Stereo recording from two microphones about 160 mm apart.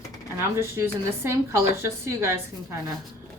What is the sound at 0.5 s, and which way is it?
Speech, 15° right (ahead or behind).